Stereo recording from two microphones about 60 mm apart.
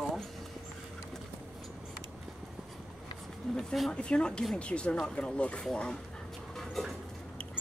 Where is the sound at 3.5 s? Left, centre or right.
Centre.